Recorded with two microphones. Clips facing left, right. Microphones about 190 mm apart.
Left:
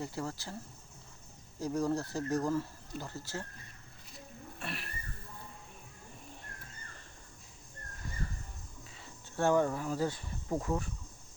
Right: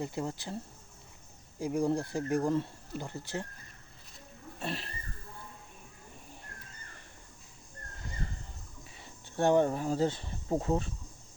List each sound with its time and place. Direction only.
0.0 s speech: 20° right (ahead or behind)
4.6 s speech: 30° right (ahead or behind)
9.3 s speech: 20° right (ahead or behind)